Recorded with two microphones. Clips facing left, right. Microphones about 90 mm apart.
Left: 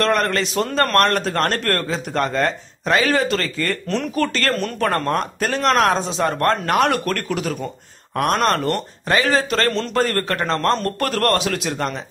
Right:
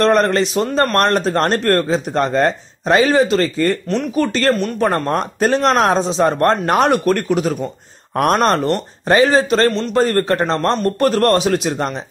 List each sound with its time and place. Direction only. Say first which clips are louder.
0.0 s speech: right 5 dB; 25° right (ahead or behind)